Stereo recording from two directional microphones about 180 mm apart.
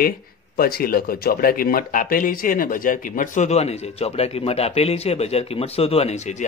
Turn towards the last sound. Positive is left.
turn(degrees=40)  # may be behind; listen again after turning